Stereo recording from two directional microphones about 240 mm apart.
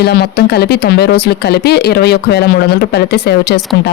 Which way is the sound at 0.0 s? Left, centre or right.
Left.